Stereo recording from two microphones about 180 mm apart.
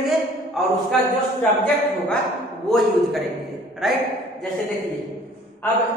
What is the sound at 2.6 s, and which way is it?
A man's voice, centre (ahead or behind).